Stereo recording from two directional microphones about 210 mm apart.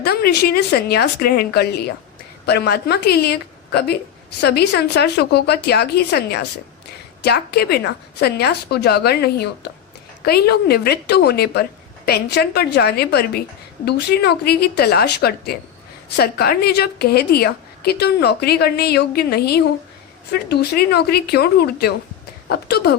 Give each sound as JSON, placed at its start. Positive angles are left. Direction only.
{"t": 0.0, "sound": "a woman's voice", "side_deg": 50}